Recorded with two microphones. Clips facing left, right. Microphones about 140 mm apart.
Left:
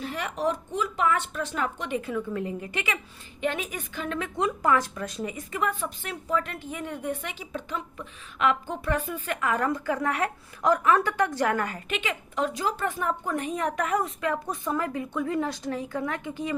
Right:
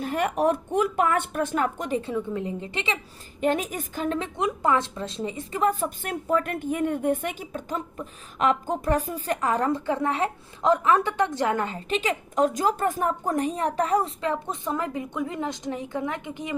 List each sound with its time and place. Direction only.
0.0 s speech: 50° right (ahead or behind)
2.0 s a woman's voice: 25° right (ahead or behind)
3.4 s speech: 40° right (ahead or behind)
4.4 s a woman's voice: 20° right (ahead or behind)